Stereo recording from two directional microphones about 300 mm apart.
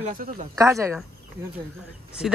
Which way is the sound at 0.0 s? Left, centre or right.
Right.